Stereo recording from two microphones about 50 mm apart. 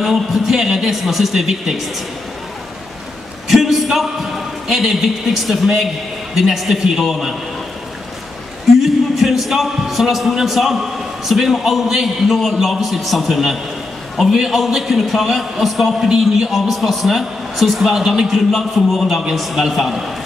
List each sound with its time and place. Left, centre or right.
0.0 s speech: centre
3.4 s a man's voice: centre
8.8 s a man's voice: centre